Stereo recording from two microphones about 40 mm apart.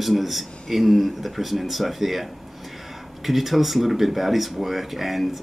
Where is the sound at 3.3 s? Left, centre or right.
Centre.